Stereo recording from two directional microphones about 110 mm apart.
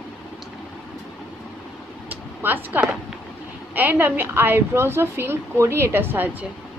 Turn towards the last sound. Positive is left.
turn(degrees=-20)  # may be behind; listen again after turning